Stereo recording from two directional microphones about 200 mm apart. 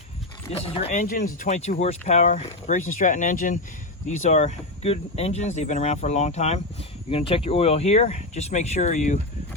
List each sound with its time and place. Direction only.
0.5 s speech: 30° left (ahead or behind)
0.9 s speech: 45° left (ahead or behind)